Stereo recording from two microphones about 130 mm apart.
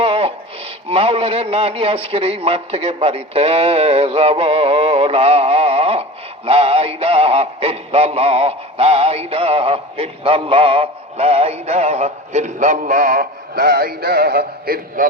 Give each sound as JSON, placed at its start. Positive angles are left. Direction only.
{"t": 0.0, "sound": "a sound", "side_deg": -45}
{"t": 0.9, "sound": "a man's voice", "side_deg": -45}
{"t": 15.0, "sound": "a man's voice", "side_deg": -90}